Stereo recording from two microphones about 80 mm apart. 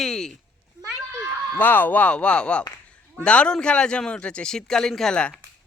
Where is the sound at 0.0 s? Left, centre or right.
Centre.